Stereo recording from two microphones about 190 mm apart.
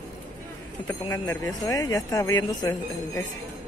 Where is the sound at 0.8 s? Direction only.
15° left (ahead or behind).